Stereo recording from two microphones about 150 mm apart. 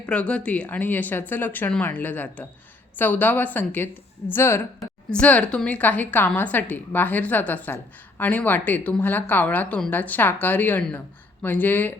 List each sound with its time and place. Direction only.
0.0 s a woman's voice: 10° left (ahead or behind)